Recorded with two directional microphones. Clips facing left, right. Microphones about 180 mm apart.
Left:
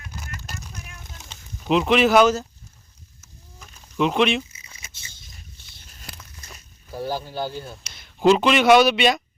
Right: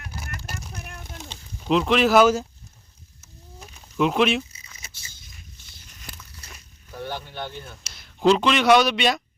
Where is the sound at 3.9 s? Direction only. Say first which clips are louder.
Even; centre (ahead or behind).